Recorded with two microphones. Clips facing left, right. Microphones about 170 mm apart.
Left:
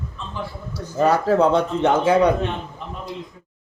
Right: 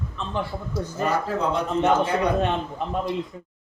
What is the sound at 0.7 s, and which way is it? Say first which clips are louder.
Speech: left 6 dB; 75° left (ahead or behind).